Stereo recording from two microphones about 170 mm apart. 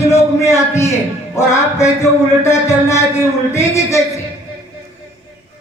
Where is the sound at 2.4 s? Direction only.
15° left (ahead or behind).